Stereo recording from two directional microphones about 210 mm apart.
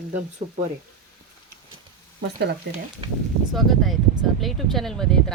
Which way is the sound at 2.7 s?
55° right (ahead or behind).